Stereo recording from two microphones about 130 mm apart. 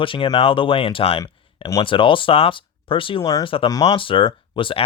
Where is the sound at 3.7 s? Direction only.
30° left (ahead or behind).